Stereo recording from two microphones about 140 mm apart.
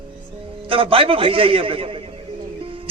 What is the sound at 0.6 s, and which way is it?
A man's voice, 40° right (ahead or behind).